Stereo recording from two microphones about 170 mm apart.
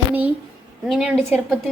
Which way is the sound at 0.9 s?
Centre (ahead or behind).